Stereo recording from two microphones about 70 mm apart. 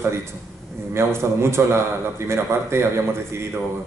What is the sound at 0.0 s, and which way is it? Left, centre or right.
A man's voice, right.